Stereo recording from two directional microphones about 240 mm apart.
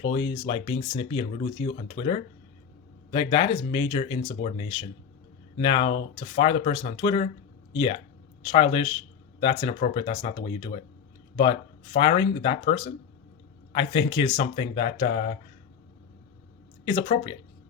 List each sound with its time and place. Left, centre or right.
0.0 s speech: left
11.9 s speech: left
16.8 s speech: centre